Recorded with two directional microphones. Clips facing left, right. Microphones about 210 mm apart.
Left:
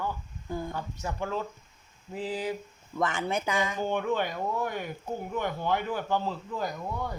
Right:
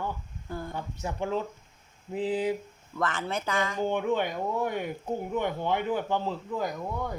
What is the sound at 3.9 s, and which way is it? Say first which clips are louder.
A man's voice: right 1 dB; 15° right (ahead or behind).